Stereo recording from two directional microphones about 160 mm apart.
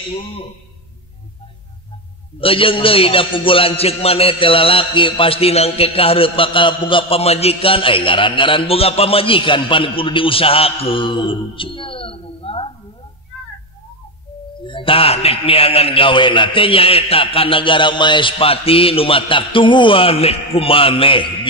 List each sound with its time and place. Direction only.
2.4 s music: 35° left (ahead or behind)
14.6 s music: 30° left (ahead or behind)